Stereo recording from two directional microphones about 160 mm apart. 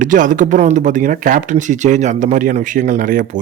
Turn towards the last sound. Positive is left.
turn(degrees=-55)  # may be behind; listen again after turning